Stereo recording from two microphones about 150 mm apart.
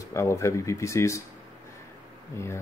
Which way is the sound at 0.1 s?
20° left (ahead or behind).